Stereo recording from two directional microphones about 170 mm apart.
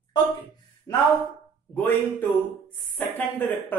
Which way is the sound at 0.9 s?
15° left (ahead or behind).